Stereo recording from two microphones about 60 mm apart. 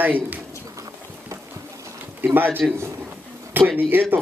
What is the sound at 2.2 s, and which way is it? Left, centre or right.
Speech, right.